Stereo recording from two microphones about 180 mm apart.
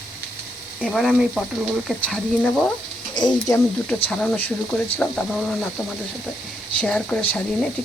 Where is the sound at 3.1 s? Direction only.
25° left (ahead or behind).